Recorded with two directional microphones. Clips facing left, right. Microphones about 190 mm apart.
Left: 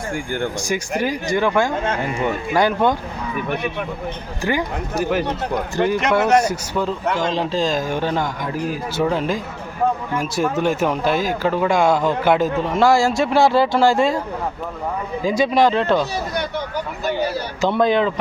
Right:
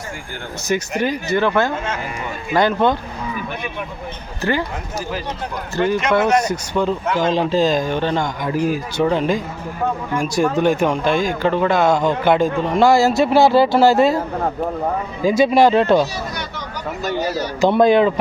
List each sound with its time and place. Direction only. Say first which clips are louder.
0.7 s speech: right 5 dB; 10° left (ahead or behind)
4.4 s speech: right 1 dB; 15° left (ahead or behind)
5.7 s speech: right 2 dB; 15° left (ahead or behind); by 7.9 s centre (ahead or behind)
7.9 s speech: right 1 dB; 10° left (ahead or behind)
15.3 s speech: right 3 dB; 10° right (ahead or behind)
16.3 s vehicle: left 5 dB; 55° left (ahead or behind)
17.6 s speech: right 4 dB; 15° right (ahead or behind)